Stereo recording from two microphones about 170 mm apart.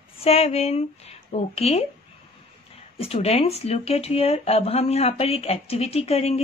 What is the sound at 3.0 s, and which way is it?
Speech, 35° left (ahead or behind).